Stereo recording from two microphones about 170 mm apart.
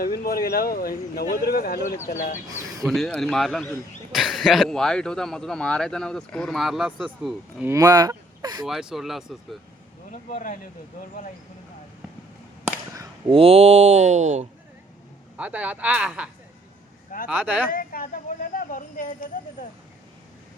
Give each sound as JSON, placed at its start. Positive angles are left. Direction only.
{"t": 0.0, "sound": "speech", "side_deg": 60}
{"t": 2.0, "sound": "speech", "side_deg": 50}
{"t": 2.8, "sound": "speech", "side_deg": 0}
{"t": 7.7, "sound": "speech", "side_deg": -20}
{"t": 8.6, "sound": "speech", "side_deg": -5}
{"t": 10.1, "sound": "speech", "side_deg": 50}
{"t": 12.6, "sound": "a sound", "side_deg": -20}
{"t": 13.3, "sound": "mantra", "side_deg": -35}
{"t": 15.4, "sound": "speech", "side_deg": -10}
{"t": 17.7, "sound": "speech", "side_deg": 55}